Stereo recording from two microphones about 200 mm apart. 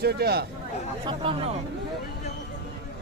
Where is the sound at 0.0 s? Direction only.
55° right (ahead or behind).